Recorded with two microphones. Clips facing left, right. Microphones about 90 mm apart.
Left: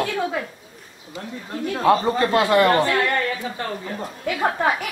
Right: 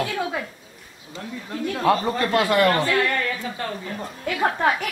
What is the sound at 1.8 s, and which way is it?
Speech, 25° left (ahead or behind).